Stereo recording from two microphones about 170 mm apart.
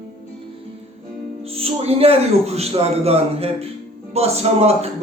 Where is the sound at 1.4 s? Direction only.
35° right (ahead or behind).